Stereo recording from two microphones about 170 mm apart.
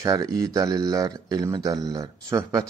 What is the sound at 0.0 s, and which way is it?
Speech, 20° right (ahead or behind).